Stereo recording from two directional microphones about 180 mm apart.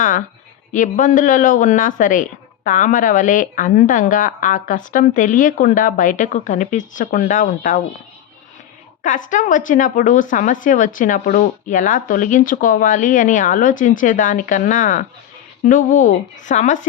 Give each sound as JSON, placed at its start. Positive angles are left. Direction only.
{"t": 0.7, "sound": "speech", "side_deg": 45}
{"t": 9.0, "sound": "speech", "side_deg": 45}